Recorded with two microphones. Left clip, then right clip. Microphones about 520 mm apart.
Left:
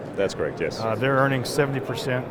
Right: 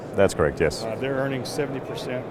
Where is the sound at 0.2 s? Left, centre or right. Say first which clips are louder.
Right 5 dB; right.